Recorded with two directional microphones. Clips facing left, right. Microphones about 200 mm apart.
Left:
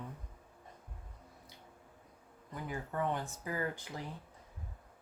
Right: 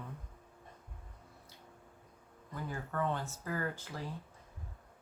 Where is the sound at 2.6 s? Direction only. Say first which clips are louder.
Even; 15° left (ahead or behind).